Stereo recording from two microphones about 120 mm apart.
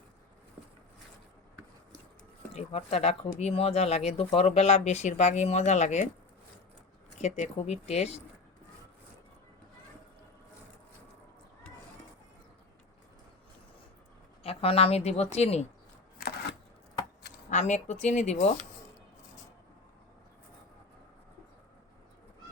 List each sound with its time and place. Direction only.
2.5 s speech: 60° left (ahead or behind)
7.2 s speech: 70° left (ahead or behind)
14.4 s speech: 55° left (ahead or behind)
17.5 s speech: 75° left (ahead or behind)